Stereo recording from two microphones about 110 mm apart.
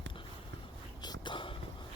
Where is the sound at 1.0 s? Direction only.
45° left (ahead or behind).